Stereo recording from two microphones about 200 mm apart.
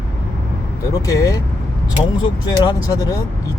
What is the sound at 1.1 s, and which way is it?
Vehicle, 15° left (ahead or behind).